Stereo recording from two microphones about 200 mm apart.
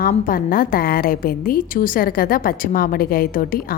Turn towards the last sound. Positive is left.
turn(degrees=45)  # may be behind; listen again after turning